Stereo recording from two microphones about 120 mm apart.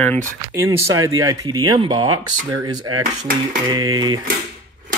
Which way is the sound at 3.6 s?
35° right (ahead or behind).